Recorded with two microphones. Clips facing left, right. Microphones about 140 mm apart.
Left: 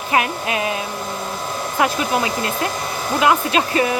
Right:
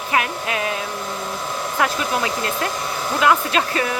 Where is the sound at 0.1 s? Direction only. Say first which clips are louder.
Left 3 dB; 20° left (ahead or behind).